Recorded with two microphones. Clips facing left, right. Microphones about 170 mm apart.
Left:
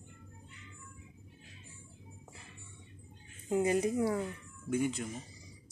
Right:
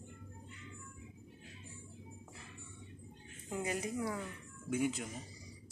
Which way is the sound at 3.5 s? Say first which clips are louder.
Left 9 dB; 25° left (ahead or behind).